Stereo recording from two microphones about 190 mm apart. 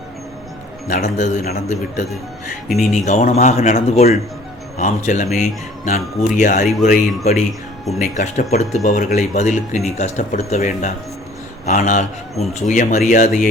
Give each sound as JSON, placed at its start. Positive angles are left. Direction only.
{"t": 0.9, "sound": "a man's voice", "side_deg": 40}
{"t": 2.7, "sound": "speech", "side_deg": 35}